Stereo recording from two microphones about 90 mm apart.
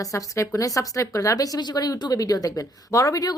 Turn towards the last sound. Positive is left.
turn(degrees=40)  # may be behind; listen again after turning